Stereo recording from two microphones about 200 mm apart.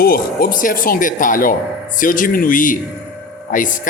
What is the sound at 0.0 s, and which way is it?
Speech, 50° left (ahead or behind).